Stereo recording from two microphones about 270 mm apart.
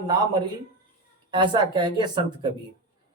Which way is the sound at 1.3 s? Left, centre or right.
Centre.